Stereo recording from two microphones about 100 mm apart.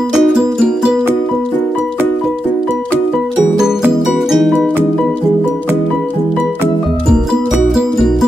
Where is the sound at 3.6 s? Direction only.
5° right (ahead or behind).